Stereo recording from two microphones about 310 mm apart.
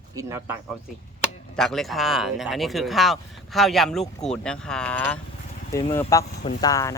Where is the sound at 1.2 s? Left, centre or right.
Centre.